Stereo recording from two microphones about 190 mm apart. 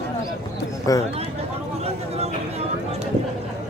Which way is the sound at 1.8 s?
35° right (ahead or behind).